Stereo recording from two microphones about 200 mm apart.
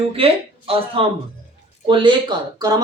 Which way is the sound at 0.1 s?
30° right (ahead or behind).